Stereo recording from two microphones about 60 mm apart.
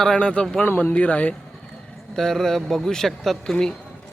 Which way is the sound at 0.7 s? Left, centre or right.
Left.